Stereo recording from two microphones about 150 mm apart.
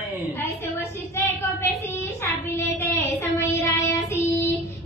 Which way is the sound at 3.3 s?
20° left (ahead or behind).